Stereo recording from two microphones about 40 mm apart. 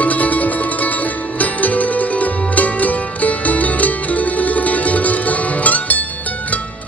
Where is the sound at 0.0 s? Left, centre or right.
Left.